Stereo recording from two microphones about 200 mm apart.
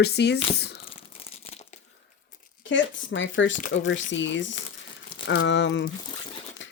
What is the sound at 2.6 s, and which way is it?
Speech, 70° left (ahead or behind).